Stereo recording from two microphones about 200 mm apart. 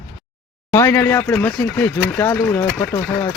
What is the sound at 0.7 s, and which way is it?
Speech, 15° left (ahead or behind).